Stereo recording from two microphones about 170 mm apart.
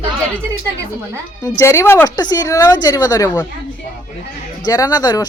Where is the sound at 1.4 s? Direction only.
15° left (ahead or behind).